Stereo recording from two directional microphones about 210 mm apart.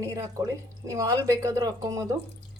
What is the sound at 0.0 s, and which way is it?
Speech, 15° right (ahead or behind).